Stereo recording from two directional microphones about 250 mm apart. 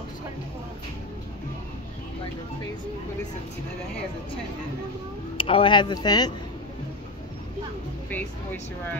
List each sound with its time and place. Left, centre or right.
5.4 s speech: centre
8.1 s speech: centre